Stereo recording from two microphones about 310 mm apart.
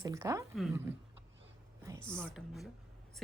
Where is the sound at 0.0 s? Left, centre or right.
Centre.